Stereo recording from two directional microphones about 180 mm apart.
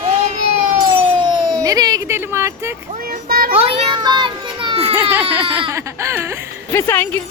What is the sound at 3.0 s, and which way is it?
Speech, 55° right (ahead or behind).